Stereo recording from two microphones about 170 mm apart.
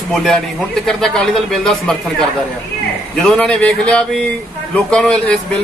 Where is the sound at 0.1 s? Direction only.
Centre (ahead or behind).